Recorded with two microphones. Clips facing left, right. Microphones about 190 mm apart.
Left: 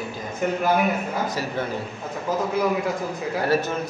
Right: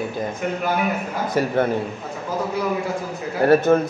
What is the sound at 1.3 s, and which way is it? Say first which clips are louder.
Speech: right 7 dB; 55° right (ahead or behind).